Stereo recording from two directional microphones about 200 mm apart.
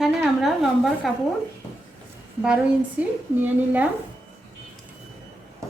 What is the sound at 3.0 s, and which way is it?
Speech, 10° right (ahead or behind).